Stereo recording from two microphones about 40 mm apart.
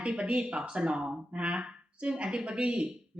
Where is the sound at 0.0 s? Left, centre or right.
Right.